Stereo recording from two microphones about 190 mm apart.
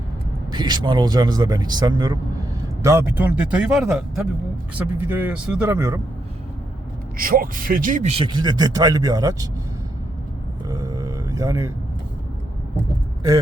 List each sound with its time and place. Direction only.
0.5 s speech: 25° right (ahead or behind)
7.2 s speech: 50° right (ahead or behind); by 9.5 s 20° right (ahead or behind)
10.7 s grunt: 20° right (ahead or behind)